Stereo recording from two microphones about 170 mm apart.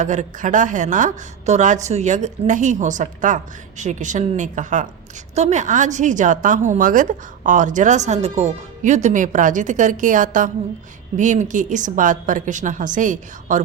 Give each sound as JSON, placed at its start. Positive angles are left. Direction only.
{"t": 0.0, "sound": "a woman's voice", "side_deg": -45}